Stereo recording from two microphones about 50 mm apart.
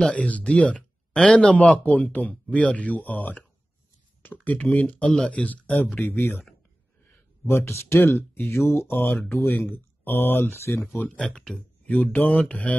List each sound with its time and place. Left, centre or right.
0.1 s speech: left
1.8 s speech: left
5.9 s speech: left
7.4 s speech: left
8.9 s speech: left
11.1 s speech: centre
11.9 s speech: left